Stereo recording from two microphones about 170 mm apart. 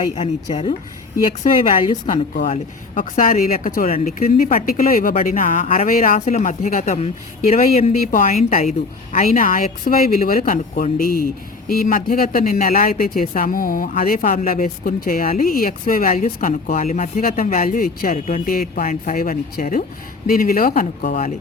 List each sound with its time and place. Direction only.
0.1 s speech: 35° left (ahead or behind)
2.9 s speech: 50° left (ahead or behind)
3.8 s speech: 40° left (ahead or behind)